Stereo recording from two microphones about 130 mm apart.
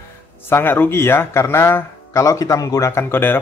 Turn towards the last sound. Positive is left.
turn(degrees=15)  # may be behind; listen again after turning